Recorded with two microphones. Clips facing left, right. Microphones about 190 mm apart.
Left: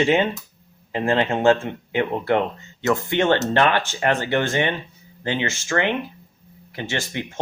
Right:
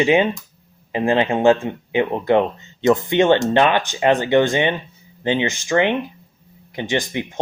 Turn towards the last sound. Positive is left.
turn(degrees=-15)  # may be behind; listen again after turning